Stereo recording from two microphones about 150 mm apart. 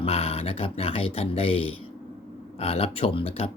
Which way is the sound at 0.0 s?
40° left (ahead or behind).